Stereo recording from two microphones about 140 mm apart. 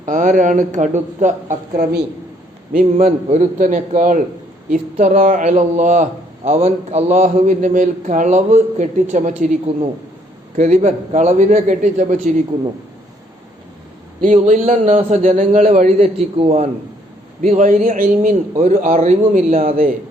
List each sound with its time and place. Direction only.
0.0 s a man's voice: 65° right (ahead or behind)
10.6 s a man's voice: 55° right (ahead or behind)
14.3 s a man's voice: 60° right (ahead or behind)
16.0 s a man's voice: 45° right (ahead or behind)
17.5 s a man's voice: 60° right (ahead or behind)